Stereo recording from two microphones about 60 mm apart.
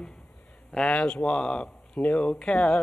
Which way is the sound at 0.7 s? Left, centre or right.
Centre.